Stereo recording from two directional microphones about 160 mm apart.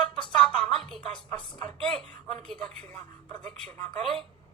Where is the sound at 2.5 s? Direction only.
5° left (ahead or behind).